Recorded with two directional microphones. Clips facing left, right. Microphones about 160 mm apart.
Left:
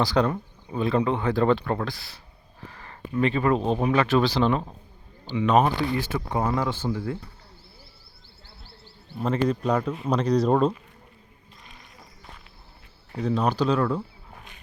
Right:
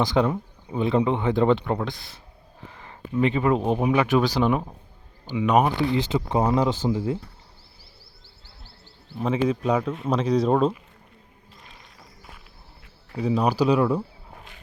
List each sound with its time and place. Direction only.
0.0 s speech: 15° right (ahead or behind)
9.1 s speech: 5° right (ahead or behind)
13.1 s speech: 10° right (ahead or behind)